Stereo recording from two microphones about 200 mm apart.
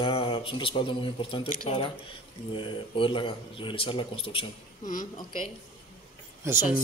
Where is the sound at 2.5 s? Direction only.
25° left (ahead or behind).